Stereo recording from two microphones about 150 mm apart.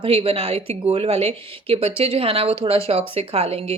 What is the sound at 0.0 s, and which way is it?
A woman's voice, 40° right (ahead or behind).